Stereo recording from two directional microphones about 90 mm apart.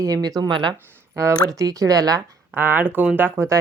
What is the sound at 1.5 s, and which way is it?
Speech, 40° right (ahead or behind).